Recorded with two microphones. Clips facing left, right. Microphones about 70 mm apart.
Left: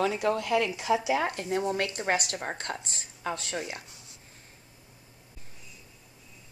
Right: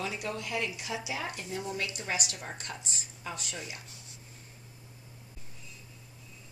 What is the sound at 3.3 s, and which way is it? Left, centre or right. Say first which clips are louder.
Speech: left 6 dB; left.